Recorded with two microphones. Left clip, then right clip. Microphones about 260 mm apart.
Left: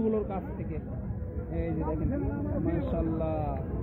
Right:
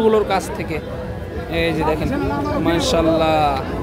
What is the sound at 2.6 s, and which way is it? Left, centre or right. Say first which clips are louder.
Speech: right 17 dB; centre.